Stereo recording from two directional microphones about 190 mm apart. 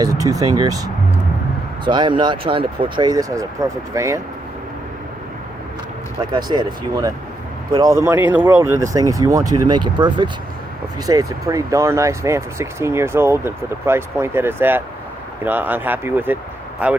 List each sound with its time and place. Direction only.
0.0 s speech: 20° right (ahead or behind)
1.8 s speech: 25° right (ahead or behind)
6.3 s speech: 20° right (ahead or behind)